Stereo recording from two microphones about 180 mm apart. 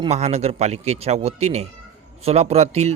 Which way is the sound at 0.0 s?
35° right (ahead or behind).